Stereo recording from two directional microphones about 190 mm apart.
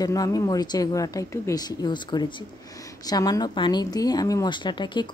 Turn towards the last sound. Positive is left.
turn(degrees=25)  # may be behind; listen again after turning